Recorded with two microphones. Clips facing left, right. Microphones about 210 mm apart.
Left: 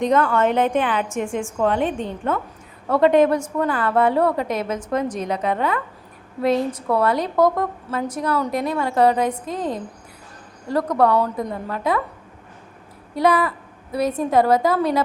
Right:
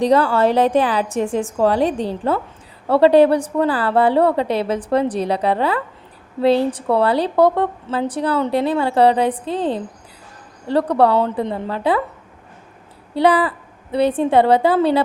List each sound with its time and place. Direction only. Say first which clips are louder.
0.0 s a woman's voice: right 3 dB; 35° right (ahead or behind)
13.1 s a woman's voice: right 3 dB; 30° right (ahead or behind)